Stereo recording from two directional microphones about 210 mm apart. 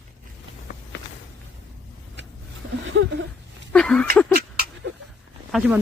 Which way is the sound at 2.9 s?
60° right (ahead or behind).